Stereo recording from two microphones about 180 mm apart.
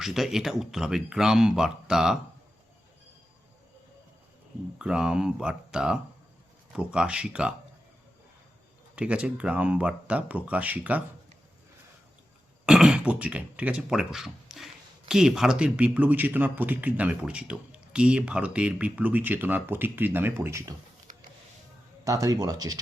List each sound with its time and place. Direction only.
0.0 s speech: centre (ahead or behind)
4.8 s speech: 5° right (ahead or behind)
9.0 s speech: 5° right (ahead or behind)
12.6 s speech: 5° right (ahead or behind)
21.1 s a sound: 45° right (ahead or behind)
22.0 s speech: 20° right (ahead or behind)